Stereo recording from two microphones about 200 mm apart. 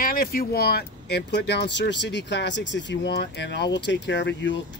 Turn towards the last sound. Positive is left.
turn(degrees=65)  # may be behind; listen again after turning